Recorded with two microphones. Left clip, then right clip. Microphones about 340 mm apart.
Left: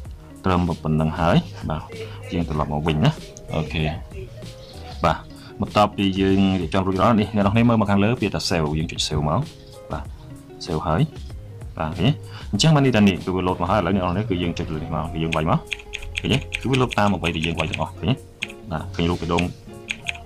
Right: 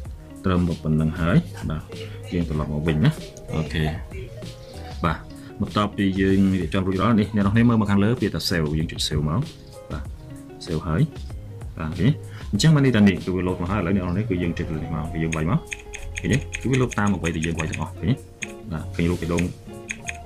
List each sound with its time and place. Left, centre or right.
0.4 s speech: centre
5.7 s speech: centre